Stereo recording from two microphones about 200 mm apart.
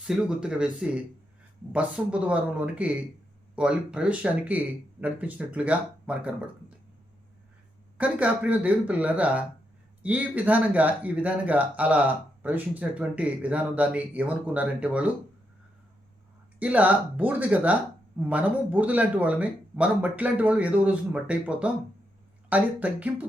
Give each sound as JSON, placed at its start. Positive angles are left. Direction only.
{"t": 0.1, "sound": "speech", "side_deg": -5}
{"t": 7.9, "sound": "speech", "side_deg": -5}
{"t": 16.6, "sound": "speech", "side_deg": -5}